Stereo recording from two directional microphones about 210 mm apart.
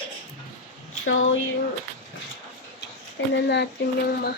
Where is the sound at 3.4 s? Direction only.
55° left (ahead or behind).